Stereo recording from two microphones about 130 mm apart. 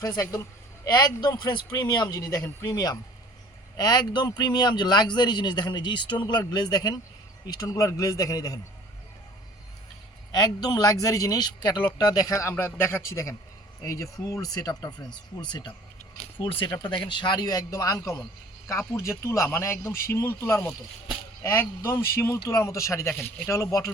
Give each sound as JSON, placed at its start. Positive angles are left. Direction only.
{"t": 0.0, "sound": "speech", "side_deg": 30}
{"t": 10.3, "sound": "speech", "side_deg": 35}